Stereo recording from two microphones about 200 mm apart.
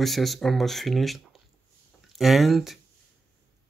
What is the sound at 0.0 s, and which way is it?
Speech, centre (ahead or behind).